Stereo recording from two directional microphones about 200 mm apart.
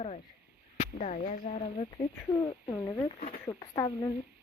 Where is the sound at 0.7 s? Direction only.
35° left (ahead or behind).